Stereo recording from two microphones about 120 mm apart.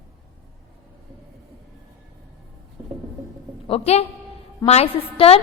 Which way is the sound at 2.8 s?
35° right (ahead or behind).